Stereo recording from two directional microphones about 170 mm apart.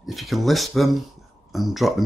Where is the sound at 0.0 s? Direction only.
Centre (ahead or behind).